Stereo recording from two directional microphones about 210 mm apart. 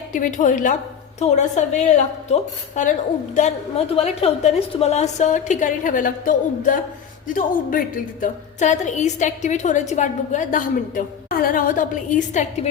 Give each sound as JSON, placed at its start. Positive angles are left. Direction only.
{"t": 0.1, "sound": "a woman's voice", "side_deg": 40}
{"t": 8.2, "sound": "a woman's voice", "side_deg": 35}